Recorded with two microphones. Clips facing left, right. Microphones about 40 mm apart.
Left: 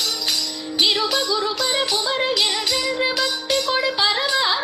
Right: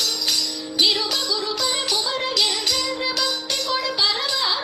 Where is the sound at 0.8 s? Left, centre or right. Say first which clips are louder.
Left 3 dB; left.